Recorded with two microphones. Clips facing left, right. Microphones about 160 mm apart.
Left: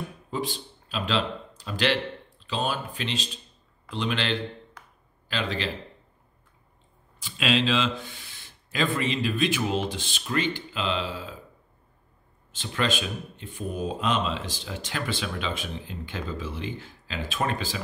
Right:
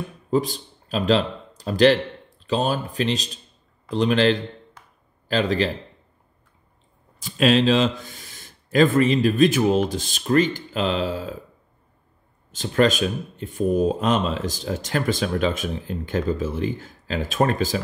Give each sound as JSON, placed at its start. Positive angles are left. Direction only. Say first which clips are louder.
{"t": 0.3, "sound": "speech", "louder": "right 10 dB", "side_deg": -40}
{"t": 7.2, "sound": "speech", "louder": "right 7 dB", "side_deg": -45}
{"t": 12.4, "sound": "speech", "louder": "right 9 dB", "side_deg": -40}